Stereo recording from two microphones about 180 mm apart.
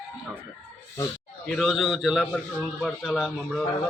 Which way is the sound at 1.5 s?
5° left (ahead or behind).